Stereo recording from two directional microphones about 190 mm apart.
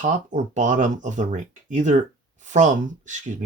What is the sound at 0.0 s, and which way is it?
Speech, 40° right (ahead or behind).